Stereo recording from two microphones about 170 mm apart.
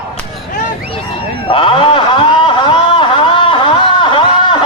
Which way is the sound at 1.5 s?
30° left (ahead or behind).